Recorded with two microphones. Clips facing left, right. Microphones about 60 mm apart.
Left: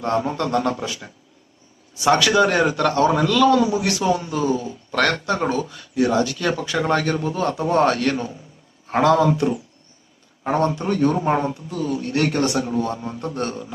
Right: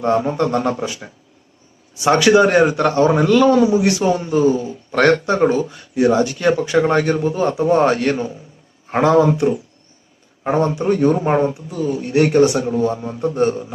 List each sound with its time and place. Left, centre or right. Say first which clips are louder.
0.0 s a man's voice: right 5 dB; right